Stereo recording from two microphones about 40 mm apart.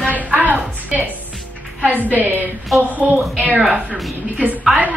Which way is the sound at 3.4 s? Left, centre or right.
Right.